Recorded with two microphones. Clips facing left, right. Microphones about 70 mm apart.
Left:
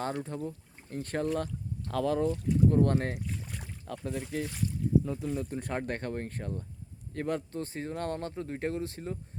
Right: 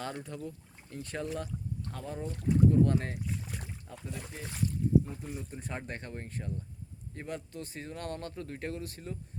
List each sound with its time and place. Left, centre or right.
0.0 s speech: left
1.9 s speech: left
2.3 s speech: right
2.6 s speech: left
3.2 s boat: centre
3.8 s speech: left
5.5 s speech: left